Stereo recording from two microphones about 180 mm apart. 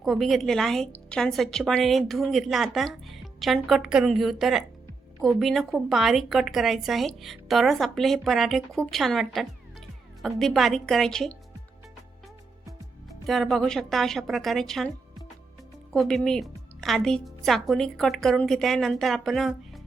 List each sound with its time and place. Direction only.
0.0 s a woman's voice: centre (ahead or behind)
13.2 s a woman's voice: centre (ahead or behind)